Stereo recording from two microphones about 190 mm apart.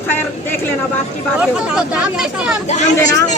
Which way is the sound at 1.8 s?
5° right (ahead or behind).